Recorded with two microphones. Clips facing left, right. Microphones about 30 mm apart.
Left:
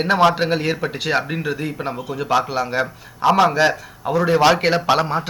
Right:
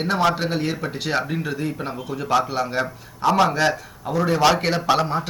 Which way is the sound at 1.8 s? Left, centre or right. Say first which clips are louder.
Left 3 dB; centre.